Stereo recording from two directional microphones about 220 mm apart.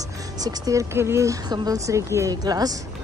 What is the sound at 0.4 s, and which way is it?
Speech, 15° right (ahead or behind).